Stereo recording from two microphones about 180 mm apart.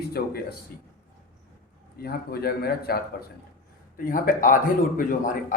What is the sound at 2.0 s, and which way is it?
A man's voice, 60° left (ahead or behind).